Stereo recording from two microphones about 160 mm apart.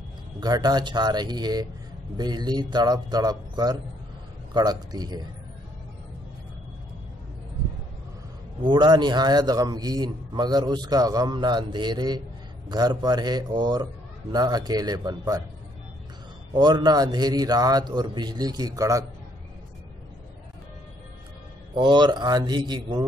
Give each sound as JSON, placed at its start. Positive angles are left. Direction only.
{"t": 0.4, "sound": "a man's voice", "side_deg": -25}
{"t": 8.6, "sound": "a man's voice", "side_deg": -30}
{"t": 16.5, "sound": "a man's voice", "side_deg": -25}
{"t": 21.7, "sound": "a man's voice", "side_deg": -30}